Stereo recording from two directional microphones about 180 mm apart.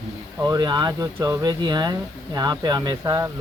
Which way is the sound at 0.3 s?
20° right (ahead or behind).